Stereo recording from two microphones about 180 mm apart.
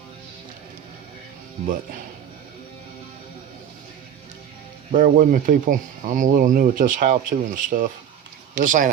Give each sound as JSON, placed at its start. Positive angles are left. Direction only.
{"t": 4.9, "sound": "speech", "side_deg": -45}